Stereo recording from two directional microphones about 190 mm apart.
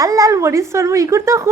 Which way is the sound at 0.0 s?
15° right (ahead or behind).